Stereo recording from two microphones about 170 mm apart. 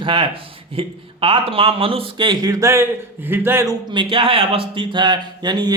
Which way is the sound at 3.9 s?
30° right (ahead or behind).